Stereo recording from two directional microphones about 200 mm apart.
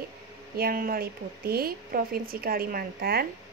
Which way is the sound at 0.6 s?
45° right (ahead or behind).